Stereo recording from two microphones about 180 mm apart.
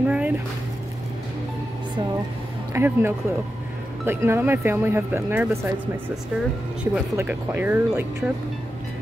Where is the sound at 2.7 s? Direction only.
15° right (ahead or behind).